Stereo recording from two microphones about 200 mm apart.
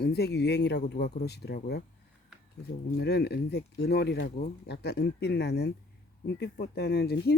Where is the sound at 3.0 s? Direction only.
55° left (ahead or behind).